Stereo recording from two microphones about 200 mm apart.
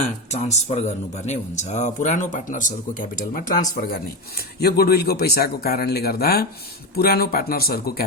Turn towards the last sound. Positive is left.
turn(degrees=50)  # may be behind; listen again after turning